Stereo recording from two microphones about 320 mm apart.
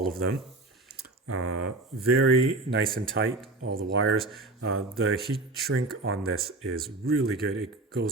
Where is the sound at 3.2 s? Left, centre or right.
Right.